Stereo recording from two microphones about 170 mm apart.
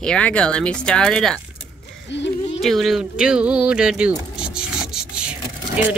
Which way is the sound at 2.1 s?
90° left.